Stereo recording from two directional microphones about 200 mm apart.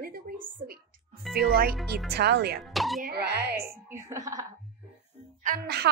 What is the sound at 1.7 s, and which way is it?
Speech, centre (ahead or behind).